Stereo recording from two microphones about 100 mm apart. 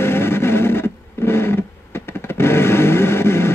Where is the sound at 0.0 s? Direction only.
25° left (ahead or behind).